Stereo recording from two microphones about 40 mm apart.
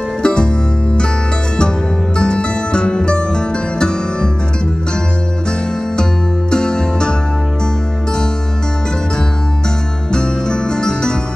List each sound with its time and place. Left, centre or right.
0.2 s music: left
2.1 s music: left
6.5 s music: centre
10.1 s music: left